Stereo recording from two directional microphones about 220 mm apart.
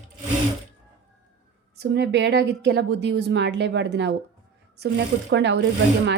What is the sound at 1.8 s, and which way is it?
Speech, 50° right (ahead or behind).